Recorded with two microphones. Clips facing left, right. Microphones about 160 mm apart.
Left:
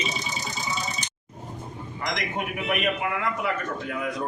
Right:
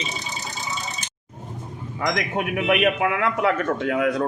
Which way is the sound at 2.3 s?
70° right (ahead or behind).